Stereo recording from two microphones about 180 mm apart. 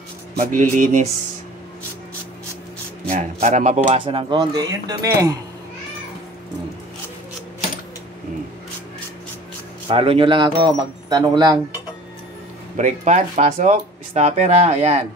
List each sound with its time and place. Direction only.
0.4 s speech: 45° right (ahead or behind)
3.1 s speech: 45° right (ahead or behind); by 5.4 s 20° right (ahead or behind)
9.8 s speech: 30° right (ahead or behind)
12.7 s speech: 40° right (ahead or behind)